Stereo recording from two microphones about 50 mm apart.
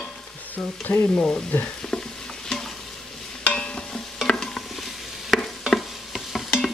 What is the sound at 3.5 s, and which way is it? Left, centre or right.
Stir, centre.